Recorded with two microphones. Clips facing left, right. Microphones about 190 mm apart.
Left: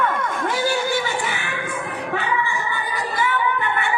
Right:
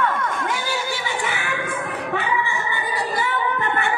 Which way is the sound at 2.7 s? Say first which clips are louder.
Right 1 dB; 35° right (ahead or behind).